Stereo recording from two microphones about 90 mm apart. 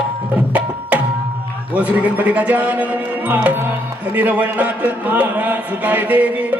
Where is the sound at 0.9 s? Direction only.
15° right (ahead or behind).